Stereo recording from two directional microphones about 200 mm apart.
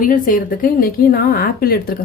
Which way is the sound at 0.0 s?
45° left (ahead or behind).